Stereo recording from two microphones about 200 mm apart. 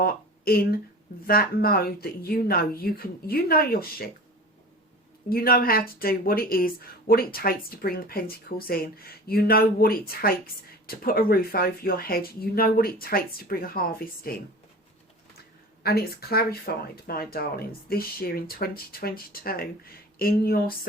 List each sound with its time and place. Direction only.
0.0 s speech: 50° left (ahead or behind)
5.3 s speech: 50° left (ahead or behind)